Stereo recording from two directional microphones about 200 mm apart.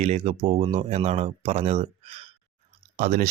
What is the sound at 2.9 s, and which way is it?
Speech, 45° right (ahead or behind).